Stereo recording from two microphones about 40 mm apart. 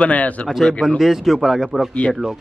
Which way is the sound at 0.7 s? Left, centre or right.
Centre.